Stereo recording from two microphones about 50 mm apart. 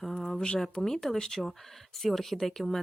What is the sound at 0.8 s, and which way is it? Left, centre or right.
Speech, centre.